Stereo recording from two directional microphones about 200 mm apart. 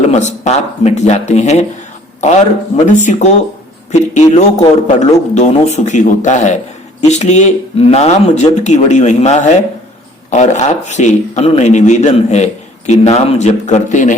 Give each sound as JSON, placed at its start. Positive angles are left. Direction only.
{"t": 0.1, "sound": "a man's voice", "side_deg": 35}